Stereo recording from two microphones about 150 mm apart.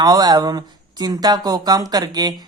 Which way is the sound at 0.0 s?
25° right (ahead or behind).